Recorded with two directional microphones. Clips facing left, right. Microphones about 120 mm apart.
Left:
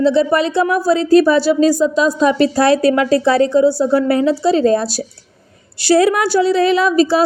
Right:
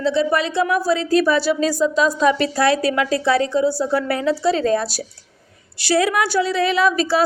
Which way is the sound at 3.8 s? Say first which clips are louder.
Left 7 dB; 25° left (ahead or behind).